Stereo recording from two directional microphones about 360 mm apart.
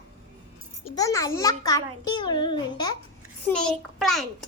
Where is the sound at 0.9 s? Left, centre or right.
Centre.